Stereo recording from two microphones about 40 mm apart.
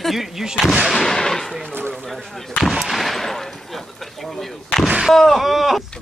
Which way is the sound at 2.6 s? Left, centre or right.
Centre.